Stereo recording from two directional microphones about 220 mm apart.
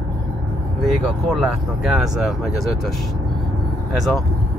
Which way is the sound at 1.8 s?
5° right (ahead or behind).